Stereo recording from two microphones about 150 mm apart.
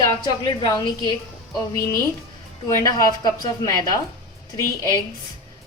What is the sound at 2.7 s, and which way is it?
A woman's voice, 25° left (ahead or behind).